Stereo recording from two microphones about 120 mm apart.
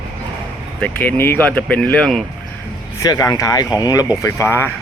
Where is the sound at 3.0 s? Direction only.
30° left (ahead or behind).